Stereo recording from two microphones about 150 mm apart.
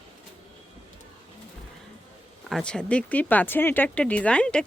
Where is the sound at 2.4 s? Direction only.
5° left (ahead or behind).